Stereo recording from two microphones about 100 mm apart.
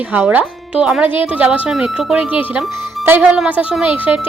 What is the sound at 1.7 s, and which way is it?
Speech, 5° right (ahead or behind).